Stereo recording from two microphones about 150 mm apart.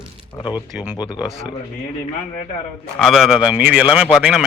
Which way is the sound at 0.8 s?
10° right (ahead or behind).